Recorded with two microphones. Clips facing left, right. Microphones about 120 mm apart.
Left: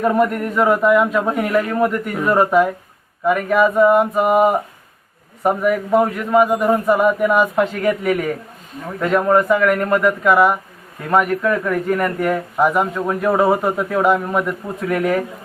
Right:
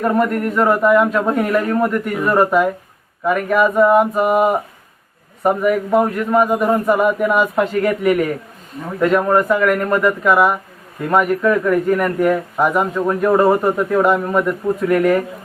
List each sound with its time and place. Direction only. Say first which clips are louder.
0.0 s a man's voice: even; centre (ahead or behind)